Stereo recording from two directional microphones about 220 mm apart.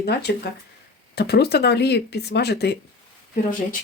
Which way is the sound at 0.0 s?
50° left (ahead or behind).